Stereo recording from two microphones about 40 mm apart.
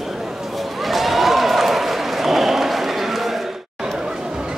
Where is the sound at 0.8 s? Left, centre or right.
Centre.